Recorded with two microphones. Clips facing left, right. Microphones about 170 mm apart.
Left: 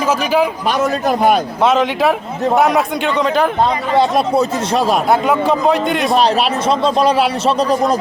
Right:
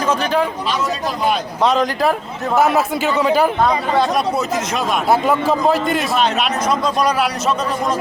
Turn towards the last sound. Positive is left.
turn(degrees=35)  # may be behind; listen again after turning